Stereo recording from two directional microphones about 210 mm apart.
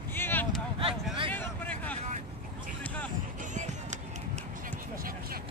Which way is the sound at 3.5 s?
35° right (ahead or behind).